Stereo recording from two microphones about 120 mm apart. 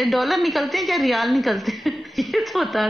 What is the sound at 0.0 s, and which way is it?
A woman's voice, centre (ahead or behind).